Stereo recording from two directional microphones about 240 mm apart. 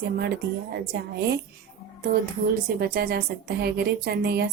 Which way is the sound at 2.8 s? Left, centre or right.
Right.